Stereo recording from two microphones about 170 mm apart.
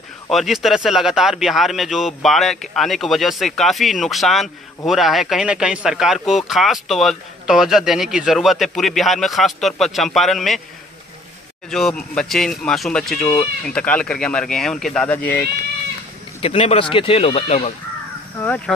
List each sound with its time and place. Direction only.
0.3 s speech: centre (ahead or behind)
11.7 s speech: 5° left (ahead or behind)
16.3 s speech: 35° left (ahead or behind)